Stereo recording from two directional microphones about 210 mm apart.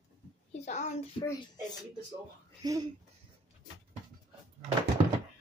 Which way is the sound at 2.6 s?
20° right (ahead or behind).